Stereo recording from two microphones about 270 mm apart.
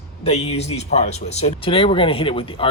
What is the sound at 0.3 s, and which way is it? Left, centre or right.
Speech, left.